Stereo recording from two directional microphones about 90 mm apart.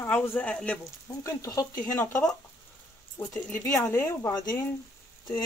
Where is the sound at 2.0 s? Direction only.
20° left (ahead or behind).